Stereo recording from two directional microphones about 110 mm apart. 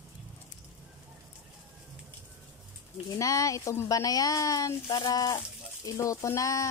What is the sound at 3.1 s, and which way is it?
Speech, 30° left (ahead or behind).